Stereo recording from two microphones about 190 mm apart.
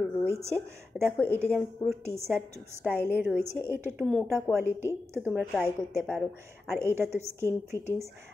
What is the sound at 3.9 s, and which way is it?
Speech, 5° left (ahead or behind).